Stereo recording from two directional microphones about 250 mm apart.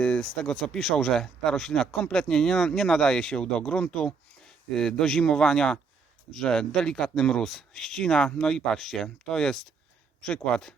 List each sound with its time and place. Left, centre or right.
0.0 s speech: centre